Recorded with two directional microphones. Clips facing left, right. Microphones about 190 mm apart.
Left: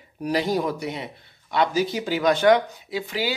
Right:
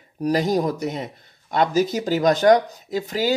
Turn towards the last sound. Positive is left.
turn(degrees=-45)  # may be behind; listen again after turning